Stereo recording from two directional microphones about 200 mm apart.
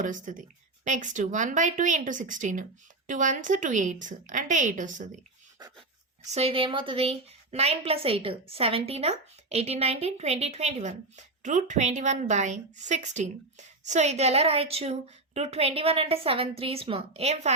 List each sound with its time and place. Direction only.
0.0 s a woman's voice: 40° right (ahead or behind)
6.2 s a woman's voice: 30° right (ahead or behind)